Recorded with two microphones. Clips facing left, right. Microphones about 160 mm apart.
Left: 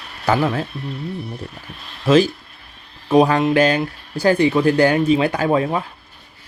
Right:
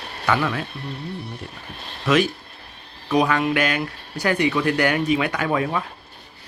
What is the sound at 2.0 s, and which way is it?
Speech, 30° left (ahead or behind).